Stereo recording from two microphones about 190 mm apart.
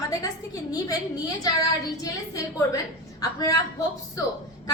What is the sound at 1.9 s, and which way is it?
A woman's voice, 20° left (ahead or behind).